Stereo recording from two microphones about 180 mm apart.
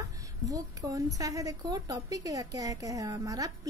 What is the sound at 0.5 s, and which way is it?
A woman's voice, 20° right (ahead or behind).